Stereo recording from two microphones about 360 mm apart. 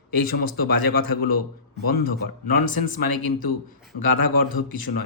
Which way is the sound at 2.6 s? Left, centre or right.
Left.